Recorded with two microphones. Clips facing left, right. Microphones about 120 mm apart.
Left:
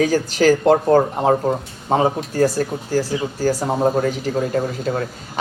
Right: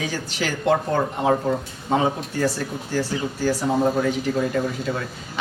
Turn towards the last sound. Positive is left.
turn(degrees=45)  # may be behind; listen again after turning